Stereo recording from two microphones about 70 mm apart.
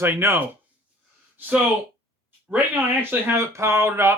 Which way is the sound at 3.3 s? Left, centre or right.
Right.